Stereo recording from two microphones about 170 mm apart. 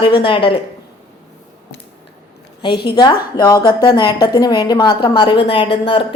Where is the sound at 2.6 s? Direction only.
25° left (ahead or behind).